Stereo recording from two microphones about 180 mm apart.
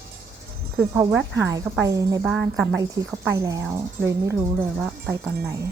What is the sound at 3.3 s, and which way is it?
Speech, 15° right (ahead or behind).